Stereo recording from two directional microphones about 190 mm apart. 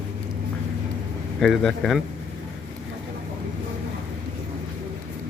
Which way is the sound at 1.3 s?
Centre (ahead or behind).